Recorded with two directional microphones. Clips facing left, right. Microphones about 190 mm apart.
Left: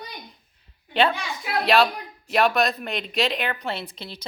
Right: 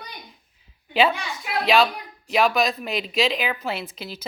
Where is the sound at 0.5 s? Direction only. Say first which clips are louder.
Right 1 dB; 5° right (ahead or behind).